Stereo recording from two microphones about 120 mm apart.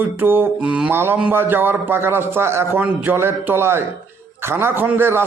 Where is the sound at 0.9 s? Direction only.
20° right (ahead or behind).